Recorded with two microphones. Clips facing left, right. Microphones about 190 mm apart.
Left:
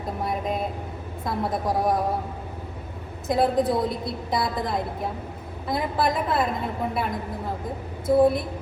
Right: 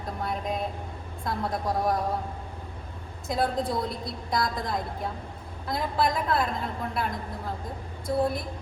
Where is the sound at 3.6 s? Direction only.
Centre (ahead or behind).